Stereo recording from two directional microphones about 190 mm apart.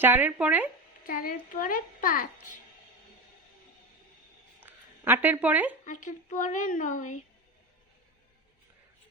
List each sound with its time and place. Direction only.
0.0 s speech: 10° right (ahead or behind)
1.0 s a child's voice: 45° left (ahead or behind)
4.6 s a sound: 10° right (ahead or behind)
5.8 s speech: 40° left (ahead or behind)